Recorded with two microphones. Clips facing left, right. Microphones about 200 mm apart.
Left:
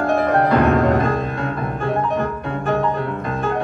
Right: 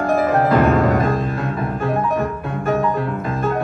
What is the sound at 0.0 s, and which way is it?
Music, centre (ahead or behind).